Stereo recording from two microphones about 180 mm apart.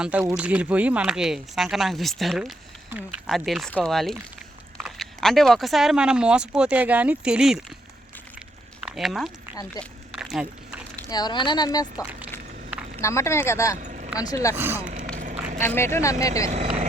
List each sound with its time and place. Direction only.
0.0 s speech: 5° right (ahead or behind)
8.8 s speech: centre (ahead or behind)
9.8 s speech: 20° left (ahead or behind)
10.1 s a sound: 5° right (ahead or behind)
11.1 s speech: 25° left (ahead or behind)
13.7 s a sound: 45° right (ahead or behind)
14.2 s speech: 20° left (ahead or behind)
14.5 s speech: 10° right (ahead or behind)
14.8 s a sound: 45° right (ahead or behind)
15.6 s speech: 15° left (ahead or behind)